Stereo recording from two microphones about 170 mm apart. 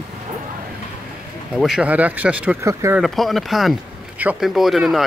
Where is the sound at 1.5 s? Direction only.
5° right (ahead or behind).